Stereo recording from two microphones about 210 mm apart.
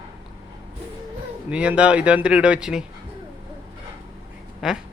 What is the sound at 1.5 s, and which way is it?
Speech, 5° right (ahead or behind).